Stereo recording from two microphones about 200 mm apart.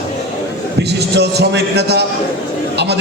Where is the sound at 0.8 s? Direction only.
55° right (ahead or behind).